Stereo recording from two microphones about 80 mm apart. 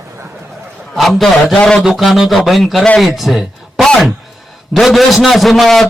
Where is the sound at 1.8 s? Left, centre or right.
Centre.